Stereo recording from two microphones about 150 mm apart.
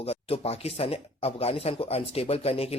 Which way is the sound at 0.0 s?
40° left (ahead or behind).